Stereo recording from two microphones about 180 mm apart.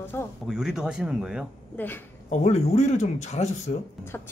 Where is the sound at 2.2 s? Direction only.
40° left (ahead or behind).